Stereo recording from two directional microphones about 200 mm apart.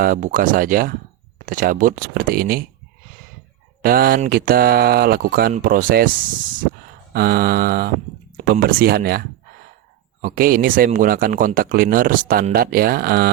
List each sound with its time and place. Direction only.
0.0 s speech: 40° right (ahead or behind)
3.8 s speech: 50° right (ahead or behind)